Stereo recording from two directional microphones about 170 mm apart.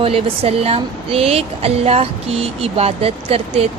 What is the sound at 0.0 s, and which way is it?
A woman's voice, 35° right (ahead or behind).